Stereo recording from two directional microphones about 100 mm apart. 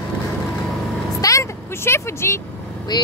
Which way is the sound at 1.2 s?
30° left (ahead or behind).